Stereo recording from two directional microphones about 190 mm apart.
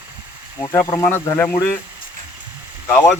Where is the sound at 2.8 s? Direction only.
10° left (ahead or behind).